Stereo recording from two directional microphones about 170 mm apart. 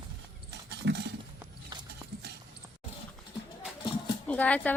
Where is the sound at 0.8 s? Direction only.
90° right.